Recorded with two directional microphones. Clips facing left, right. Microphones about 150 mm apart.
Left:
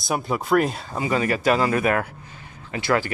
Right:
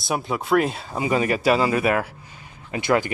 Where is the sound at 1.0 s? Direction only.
15° right (ahead or behind).